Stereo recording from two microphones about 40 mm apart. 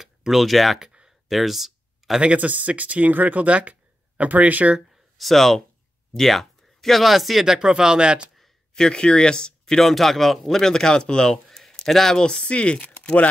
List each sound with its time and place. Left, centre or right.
0.0 s speech: centre
0.7 s a sound: centre
1.3 s a sound: centre
2.3 s speech: right
5.1 s speech: centre
7.5 s speech: centre
8.7 s speech: left
9.8 s speech: centre
10.6 s speech: centre
11.4 s a sound: centre
12.2 s speech: left